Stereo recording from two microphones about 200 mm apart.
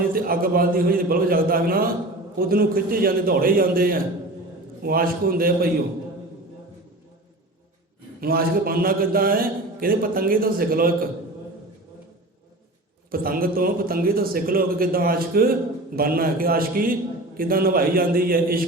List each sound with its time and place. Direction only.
0.1 s a man's voice: 45° right (ahead or behind)
8.2 s a man's voice: 50° right (ahead or behind)
13.1 s a man's voice: 45° right (ahead or behind)